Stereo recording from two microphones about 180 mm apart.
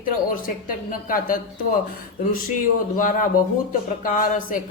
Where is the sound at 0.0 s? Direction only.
50° left (ahead or behind).